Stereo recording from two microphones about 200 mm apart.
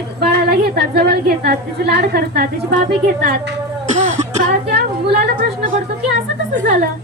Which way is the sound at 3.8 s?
35° right (ahead or behind).